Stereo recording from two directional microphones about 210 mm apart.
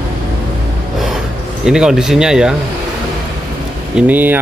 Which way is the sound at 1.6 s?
5° right (ahead or behind).